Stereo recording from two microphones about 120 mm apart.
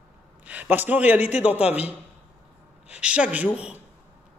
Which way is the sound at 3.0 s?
10° right (ahead or behind).